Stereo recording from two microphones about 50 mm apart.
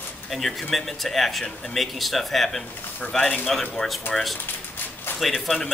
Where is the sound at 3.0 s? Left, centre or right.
Left.